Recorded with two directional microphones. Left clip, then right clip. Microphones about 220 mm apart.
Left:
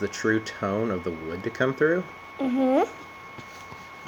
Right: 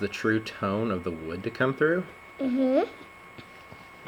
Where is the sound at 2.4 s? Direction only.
15° left (ahead or behind).